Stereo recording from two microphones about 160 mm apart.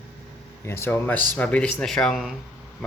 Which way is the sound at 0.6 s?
15° left (ahead or behind).